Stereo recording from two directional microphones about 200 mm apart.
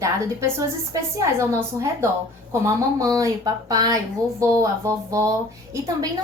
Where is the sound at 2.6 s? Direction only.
15° right (ahead or behind).